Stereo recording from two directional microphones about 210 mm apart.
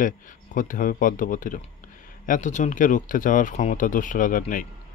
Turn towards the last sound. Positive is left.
turn(degrees=40)  # may be behind; listen again after turning